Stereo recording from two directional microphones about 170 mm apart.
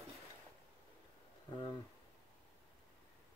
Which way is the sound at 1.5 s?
25° left (ahead or behind).